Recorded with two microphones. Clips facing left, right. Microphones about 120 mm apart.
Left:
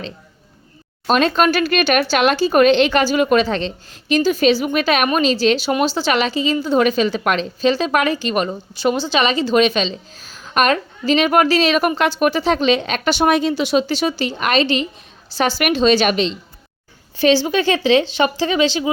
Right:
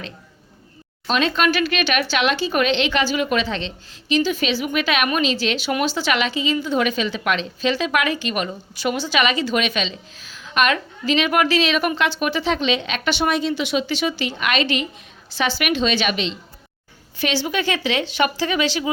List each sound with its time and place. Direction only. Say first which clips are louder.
1.0 s a woman's voice: left 4 dB; 45° left (ahead or behind)
13.5 s a woman's voice: left 4 dB; 35° left (ahead or behind)